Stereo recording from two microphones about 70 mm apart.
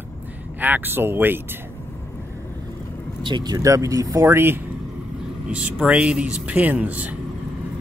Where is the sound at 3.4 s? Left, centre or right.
Right.